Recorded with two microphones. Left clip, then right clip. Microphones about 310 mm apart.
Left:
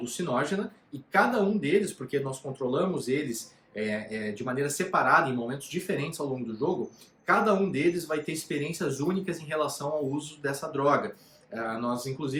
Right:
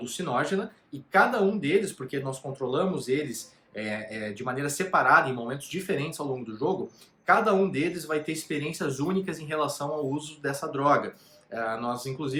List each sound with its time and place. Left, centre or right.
0.0 s speech: centre